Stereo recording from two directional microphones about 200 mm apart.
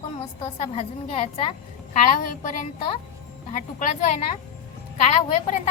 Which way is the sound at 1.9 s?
40° left (ahead or behind).